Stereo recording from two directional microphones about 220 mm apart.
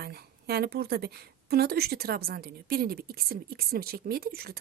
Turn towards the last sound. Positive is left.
turn(degrees=-45)  # may be behind; listen again after turning